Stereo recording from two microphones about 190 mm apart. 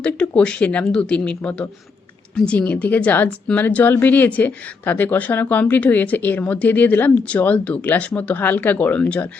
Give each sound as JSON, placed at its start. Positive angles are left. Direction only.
{"t": 0.0, "sound": "a woman's voice", "side_deg": 5}